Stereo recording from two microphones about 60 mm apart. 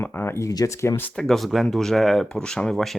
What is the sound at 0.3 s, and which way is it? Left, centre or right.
Speech, left.